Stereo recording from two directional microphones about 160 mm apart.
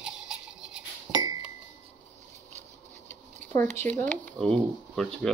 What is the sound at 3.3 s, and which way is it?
Speech, 10° left (ahead or behind).